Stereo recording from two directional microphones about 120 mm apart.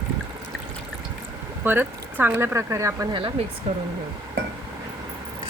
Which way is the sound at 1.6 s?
15° right (ahead or behind).